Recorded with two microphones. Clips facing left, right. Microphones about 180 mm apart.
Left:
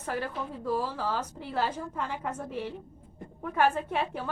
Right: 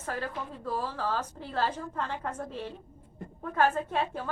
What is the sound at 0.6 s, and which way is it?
A woman's voice, 10° left (ahead or behind).